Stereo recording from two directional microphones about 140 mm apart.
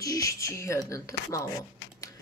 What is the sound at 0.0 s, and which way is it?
Speech, 25° left (ahead or behind).